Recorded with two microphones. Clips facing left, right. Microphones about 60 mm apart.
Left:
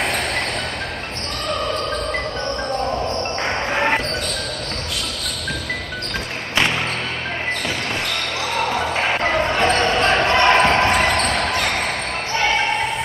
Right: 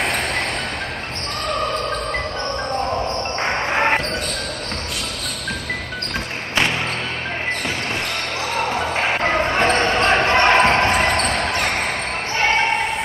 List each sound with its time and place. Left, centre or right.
3.4 s music: centre
8.5 s basketball bounce: centre
11.5 s basketball bounce: centre